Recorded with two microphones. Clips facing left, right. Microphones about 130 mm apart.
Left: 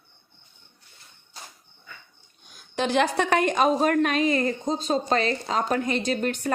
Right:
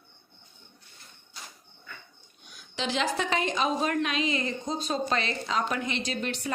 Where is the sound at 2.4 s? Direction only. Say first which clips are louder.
Left 6 dB; 45° left (ahead or behind).